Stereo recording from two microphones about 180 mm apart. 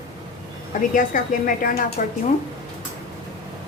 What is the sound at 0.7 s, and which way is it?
Speech, 45° left (ahead or behind).